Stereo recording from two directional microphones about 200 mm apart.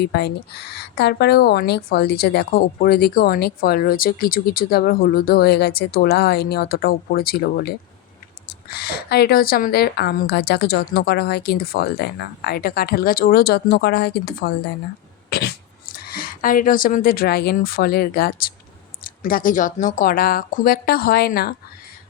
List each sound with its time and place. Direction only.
0.0 s a woman's voice: 55° left (ahead or behind)
8.7 s a woman's voice: 50° left (ahead or behind)
15.3 s cough: 55° left (ahead or behind)
16.0 s a woman's voice: 45° left (ahead or behind)